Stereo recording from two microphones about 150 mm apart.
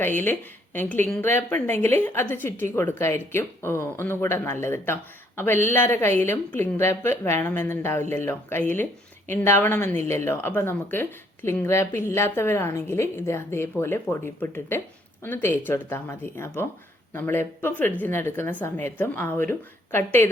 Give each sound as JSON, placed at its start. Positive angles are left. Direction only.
{"t": 0.0, "sound": "speech", "side_deg": 15}